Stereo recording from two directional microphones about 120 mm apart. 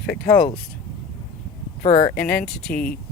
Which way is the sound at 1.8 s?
55° left (ahead or behind).